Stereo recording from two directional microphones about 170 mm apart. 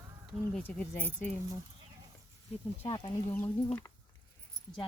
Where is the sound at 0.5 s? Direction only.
10° left (ahead or behind).